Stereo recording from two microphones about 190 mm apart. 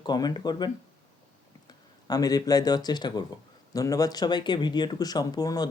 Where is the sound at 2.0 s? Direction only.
20° left (ahead or behind).